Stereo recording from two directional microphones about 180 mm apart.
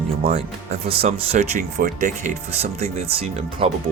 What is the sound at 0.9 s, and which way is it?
Speech, 30° right (ahead or behind).